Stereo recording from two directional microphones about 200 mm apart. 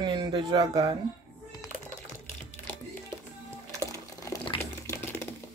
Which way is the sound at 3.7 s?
15° left (ahead or behind).